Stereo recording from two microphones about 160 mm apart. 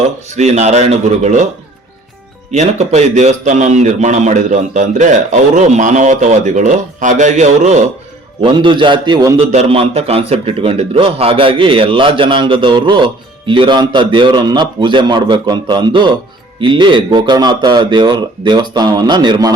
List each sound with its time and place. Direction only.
0.3 s a man's voice: 45° right (ahead or behind)
2.5 s a man's voice: 45° right (ahead or behind)
8.4 s a man's voice: 30° right (ahead or behind)
9.5 s a man's voice: 40° right (ahead or behind); by 19.5 s 25° right (ahead or behind)